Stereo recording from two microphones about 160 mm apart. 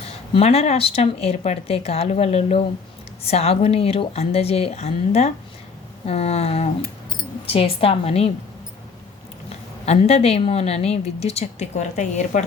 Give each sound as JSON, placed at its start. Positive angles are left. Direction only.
{"t": 0.0, "sound": "speech", "side_deg": 40}
{"t": 9.8, "sound": "speech", "side_deg": 40}